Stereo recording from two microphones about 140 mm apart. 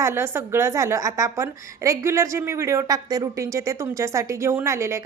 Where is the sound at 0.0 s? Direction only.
15° right (ahead or behind).